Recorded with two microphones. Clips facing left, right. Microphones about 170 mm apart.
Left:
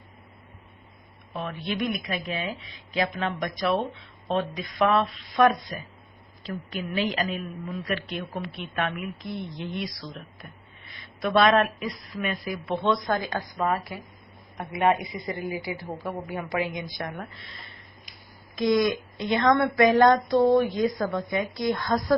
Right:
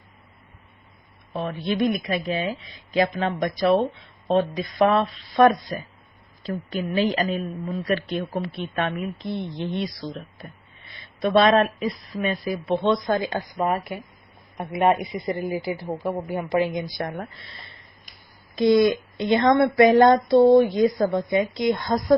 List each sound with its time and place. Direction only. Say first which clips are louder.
1.3 s a woman's voice: right 5 dB; 35° right (ahead or behind)
11.2 s a woman's voice: right 3 dB; 30° right (ahead or behind)
14.8 s a woman's voice: right 3 dB; 35° right (ahead or behind)
18.5 s a woman's voice: right 5 dB; 30° right (ahead or behind)